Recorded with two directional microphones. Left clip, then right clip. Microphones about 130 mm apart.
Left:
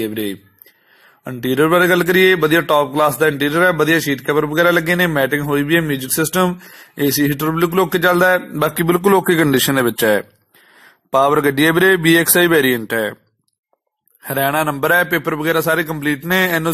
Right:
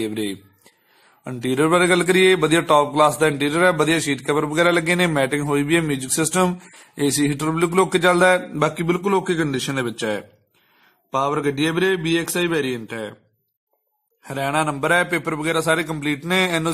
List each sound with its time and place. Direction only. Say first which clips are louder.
0.0 s a man's voice: left 3 dB; 10° left (ahead or behind)
8.6 s speech: left 8 dB; 45° left (ahead or behind)
14.2 s a man's voice: left 5 dB; 35° left (ahead or behind)